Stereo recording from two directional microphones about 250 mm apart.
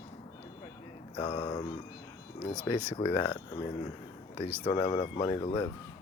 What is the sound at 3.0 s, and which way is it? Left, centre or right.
Speech, centre.